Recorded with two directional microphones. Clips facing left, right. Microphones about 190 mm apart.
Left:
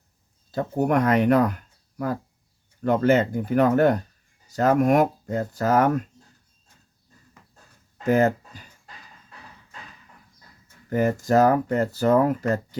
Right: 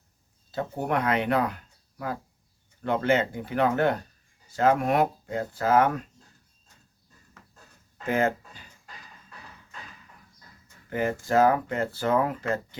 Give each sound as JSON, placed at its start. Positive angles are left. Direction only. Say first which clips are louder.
{"t": 0.5, "sound": "speech", "louder": "left 6 dB", "side_deg": 45}
{"t": 8.0, "sound": "a sound", "louder": "left 5 dB", "side_deg": 40}
{"t": 10.8, "sound": "speech", "louder": "left 5 dB", "side_deg": 40}